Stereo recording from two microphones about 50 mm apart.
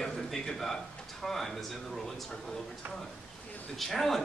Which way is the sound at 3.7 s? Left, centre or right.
Centre.